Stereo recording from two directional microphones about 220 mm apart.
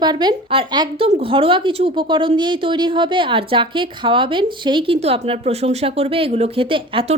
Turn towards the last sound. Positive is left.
turn(degrees=-25)  # may be behind; listen again after turning